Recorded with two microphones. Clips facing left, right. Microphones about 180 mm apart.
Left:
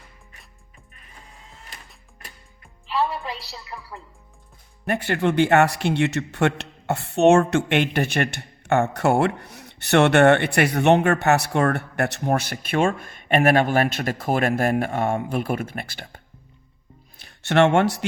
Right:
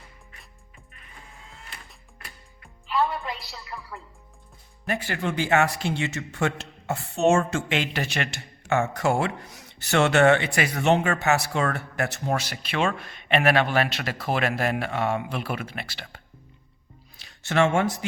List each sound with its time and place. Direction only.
2.8 s a woman's voice: 35° left (ahead or behind)
4.9 s a man's voice: 60° left (ahead or behind)
17.2 s speech: 65° left (ahead or behind)